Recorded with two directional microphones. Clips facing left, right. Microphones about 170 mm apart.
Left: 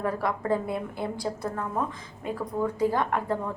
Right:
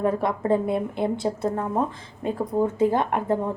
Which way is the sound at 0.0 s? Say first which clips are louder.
Right 5 dB; 25° right (ahead or behind).